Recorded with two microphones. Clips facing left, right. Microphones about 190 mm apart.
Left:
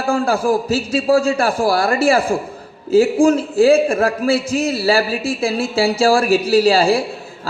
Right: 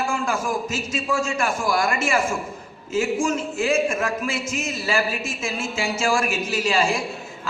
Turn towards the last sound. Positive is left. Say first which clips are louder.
# left 9 dB
turn(degrees=35)  # may be behind; listen again after turning